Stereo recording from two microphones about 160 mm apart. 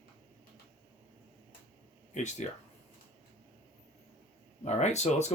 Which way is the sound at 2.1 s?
50° left (ahead or behind).